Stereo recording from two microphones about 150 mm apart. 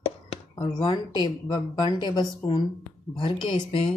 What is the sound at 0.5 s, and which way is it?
Speech, 25° left (ahead or behind).